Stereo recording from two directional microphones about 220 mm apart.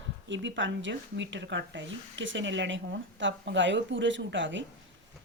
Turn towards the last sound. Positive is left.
turn(degrees=-55)  # may be behind; listen again after turning